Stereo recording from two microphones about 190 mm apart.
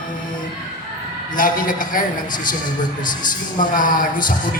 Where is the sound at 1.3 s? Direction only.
45° left (ahead or behind).